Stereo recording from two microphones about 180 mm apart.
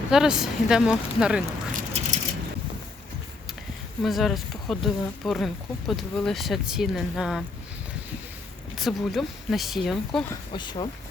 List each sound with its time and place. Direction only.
0.1 s speech: 5° right (ahead or behind)
1.7 s a sound: 45° right (ahead or behind)
4.0 s speech: centre (ahead or behind)
8.7 s speech: centre (ahead or behind)
10.5 s speech: 25° left (ahead or behind)